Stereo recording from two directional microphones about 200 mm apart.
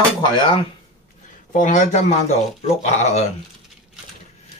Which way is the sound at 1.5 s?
40° left (ahead or behind).